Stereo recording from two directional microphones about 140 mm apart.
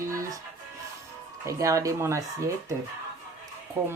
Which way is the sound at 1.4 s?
20° right (ahead or behind).